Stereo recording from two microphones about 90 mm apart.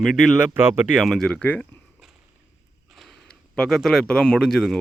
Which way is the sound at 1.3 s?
15° left (ahead or behind).